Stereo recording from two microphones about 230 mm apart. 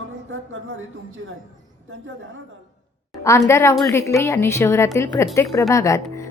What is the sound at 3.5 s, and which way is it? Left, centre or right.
A woman's voice, centre.